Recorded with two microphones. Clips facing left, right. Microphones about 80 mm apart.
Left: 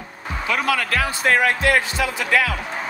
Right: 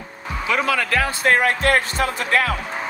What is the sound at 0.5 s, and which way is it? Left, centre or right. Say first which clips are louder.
Speech: right 1 dB; right.